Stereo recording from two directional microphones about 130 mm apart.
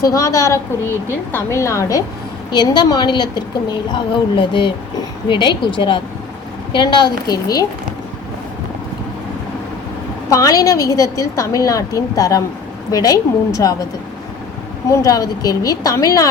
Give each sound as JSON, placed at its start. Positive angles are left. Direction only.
{"t": 0.0, "sound": "a woman's voice", "side_deg": 25}
{"t": 10.2, "sound": "a woman's voice", "side_deg": 25}
{"t": 14.8, "sound": "a woman's voice", "side_deg": 30}